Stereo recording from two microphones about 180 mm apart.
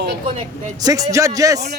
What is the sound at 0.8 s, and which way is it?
Speech, 20° right (ahead or behind).